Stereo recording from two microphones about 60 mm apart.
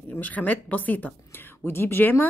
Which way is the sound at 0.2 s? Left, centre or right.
Left.